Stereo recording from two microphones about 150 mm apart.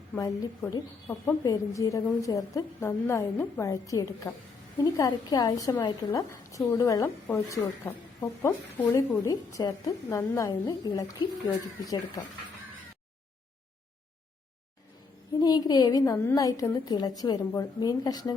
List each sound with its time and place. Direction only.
0.2 s a woman's voice: 25° left (ahead or behind)
15.4 s a woman's voice: 25° left (ahead or behind)